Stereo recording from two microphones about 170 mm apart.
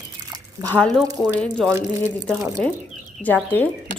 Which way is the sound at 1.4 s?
5° left (ahead or behind).